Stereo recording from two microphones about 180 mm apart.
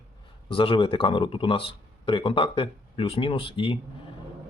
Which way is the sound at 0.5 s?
30° left (ahead or behind).